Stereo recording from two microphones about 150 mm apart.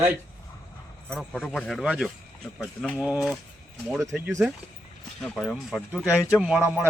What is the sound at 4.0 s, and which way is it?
Speech, 15° right (ahead or behind).